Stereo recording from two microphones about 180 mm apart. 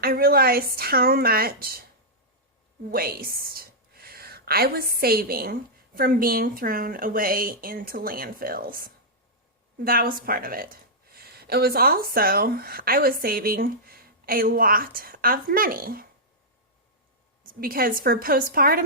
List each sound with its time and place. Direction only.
0.0 s speech: 55° right (ahead or behind)
2.9 s a sound: 55° right (ahead or behind)
4.9 s a woman's voice: 55° right (ahead or behind)
17.4 s a woman's voice: 55° right (ahead or behind)